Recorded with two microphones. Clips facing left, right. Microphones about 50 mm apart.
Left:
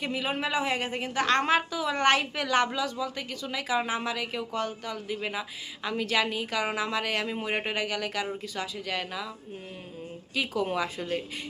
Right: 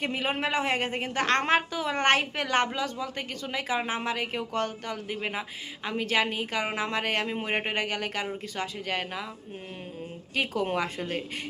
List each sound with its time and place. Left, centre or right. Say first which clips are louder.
0.0 s speech: right 1 dB; right
10.3 s speech: right 1 dB; right